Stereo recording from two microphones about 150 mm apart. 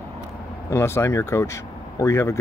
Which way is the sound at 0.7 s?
15° left (ahead or behind).